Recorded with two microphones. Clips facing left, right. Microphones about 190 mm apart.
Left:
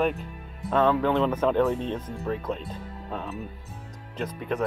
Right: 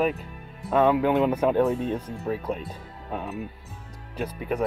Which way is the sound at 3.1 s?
10° right (ahead or behind).